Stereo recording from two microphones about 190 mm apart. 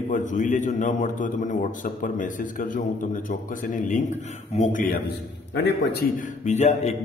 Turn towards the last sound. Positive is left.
turn(degrees=35)  # may be behind; listen again after turning